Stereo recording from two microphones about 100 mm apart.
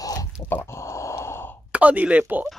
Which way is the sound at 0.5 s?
25° left (ahead or behind).